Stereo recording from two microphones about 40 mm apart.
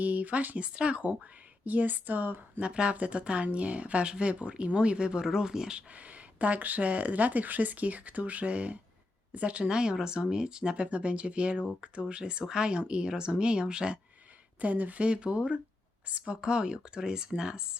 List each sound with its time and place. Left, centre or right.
0.0 s speech: right
1.6 s speech: right
2.6 s speech: right
5.9 s speech: right
9.6 s speech: centre
10.8 s speech: right
14.6 s speech: right; by 17.7 s centre